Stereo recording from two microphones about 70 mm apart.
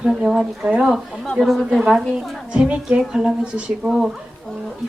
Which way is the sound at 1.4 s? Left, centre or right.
Centre.